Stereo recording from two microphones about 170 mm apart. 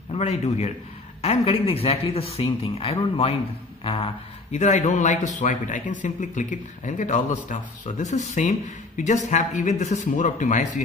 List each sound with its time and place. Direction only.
0.1 s a man's voice: 35° left (ahead or behind)